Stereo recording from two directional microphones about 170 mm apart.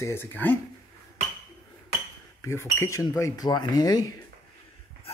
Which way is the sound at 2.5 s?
15° left (ahead or behind).